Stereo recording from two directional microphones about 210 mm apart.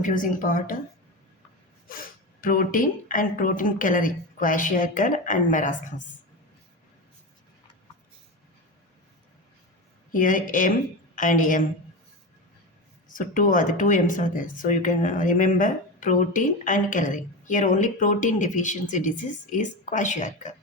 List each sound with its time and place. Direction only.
0.0 s speech: 40° left (ahead or behind)
1.9 s speech: 40° left (ahead or behind)
10.1 s a woman's voice: 40° left (ahead or behind)
13.1 s speech: 40° left (ahead or behind)